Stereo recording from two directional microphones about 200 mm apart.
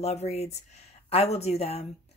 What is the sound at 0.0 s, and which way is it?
Speech, 30° left (ahead or behind).